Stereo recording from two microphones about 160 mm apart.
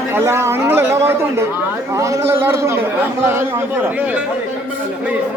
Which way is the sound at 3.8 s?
10° right (ahead or behind).